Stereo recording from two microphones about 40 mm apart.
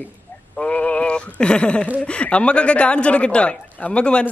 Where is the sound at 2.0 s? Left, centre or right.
Left.